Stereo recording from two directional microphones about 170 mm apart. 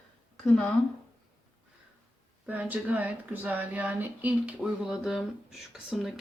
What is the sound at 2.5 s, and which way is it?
Speech, 10° right (ahead or behind).